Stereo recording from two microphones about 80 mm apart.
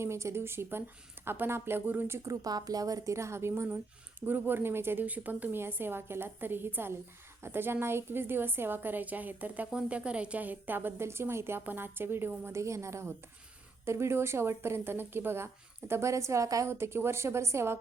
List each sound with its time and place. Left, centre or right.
0.0 s speech: right
2.1 s a woman's voice: right